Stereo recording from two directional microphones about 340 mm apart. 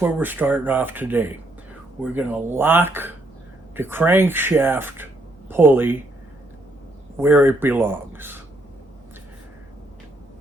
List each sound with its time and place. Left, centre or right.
0.0 s speech: centre
7.2 s speech: centre